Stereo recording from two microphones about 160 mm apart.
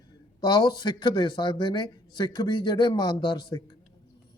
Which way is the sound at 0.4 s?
25° left (ahead or behind).